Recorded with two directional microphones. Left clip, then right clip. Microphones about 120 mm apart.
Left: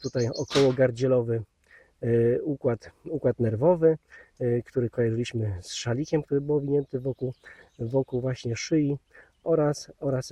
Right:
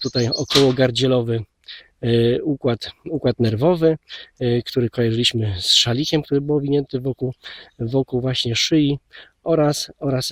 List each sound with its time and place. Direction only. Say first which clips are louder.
0.0 s speech: right 7 dB; 30° right (ahead or behind)
8.3 s speech: right 9 dB; 40° right (ahead or behind)
10.0 s speech: right 3 dB; 30° right (ahead or behind)